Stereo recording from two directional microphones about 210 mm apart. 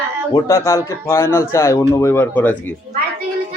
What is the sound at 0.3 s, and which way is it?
Speech, 15° left (ahead or behind).